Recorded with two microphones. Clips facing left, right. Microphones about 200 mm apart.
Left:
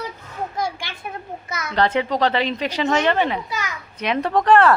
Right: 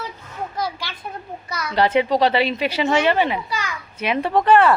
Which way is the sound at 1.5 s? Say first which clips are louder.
Right 2 dB; 25° left (ahead or behind).